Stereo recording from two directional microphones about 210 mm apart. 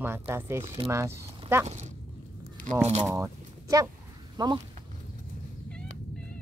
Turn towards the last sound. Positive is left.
turn(degrees=-20)  # may be behind; listen again after turning